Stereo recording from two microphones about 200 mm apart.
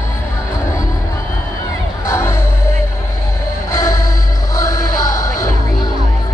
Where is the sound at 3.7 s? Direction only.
15° left (ahead or behind).